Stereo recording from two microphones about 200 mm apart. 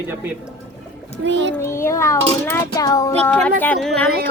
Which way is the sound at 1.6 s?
15° left (ahead or behind).